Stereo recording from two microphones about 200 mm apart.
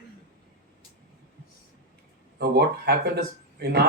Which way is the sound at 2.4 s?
55° right (ahead or behind).